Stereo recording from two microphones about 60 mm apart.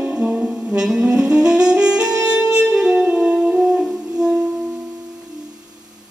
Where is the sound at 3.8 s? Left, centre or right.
Centre.